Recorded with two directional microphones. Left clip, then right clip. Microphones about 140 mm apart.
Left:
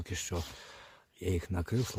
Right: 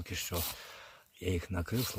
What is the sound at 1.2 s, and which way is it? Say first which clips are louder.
Speech: left 1 dB; 15° left (ahead or behind).